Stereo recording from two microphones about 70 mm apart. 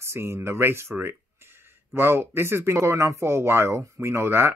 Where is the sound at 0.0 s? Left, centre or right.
Right.